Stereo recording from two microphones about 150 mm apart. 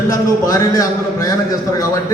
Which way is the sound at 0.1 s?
20° left (ahead or behind).